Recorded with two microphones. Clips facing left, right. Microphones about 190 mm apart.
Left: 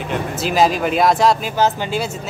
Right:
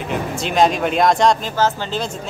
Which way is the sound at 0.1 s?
5° left (ahead or behind).